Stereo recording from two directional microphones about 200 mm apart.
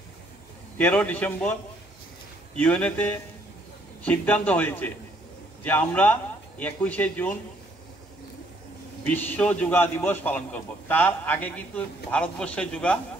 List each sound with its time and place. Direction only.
0.7 s a man's voice: 10° left (ahead or behind)
2.6 s a man's voice: 5° left (ahead or behind)
9.0 s a man's voice: 10° left (ahead or behind)